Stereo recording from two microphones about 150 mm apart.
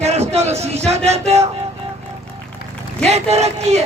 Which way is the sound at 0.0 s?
45° right (ahead or behind).